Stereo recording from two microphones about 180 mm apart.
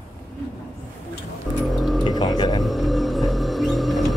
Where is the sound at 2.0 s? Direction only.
20° left (ahead or behind).